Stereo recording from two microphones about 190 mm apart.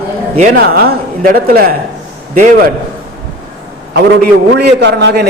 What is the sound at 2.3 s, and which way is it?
Speech, 40° right (ahead or behind).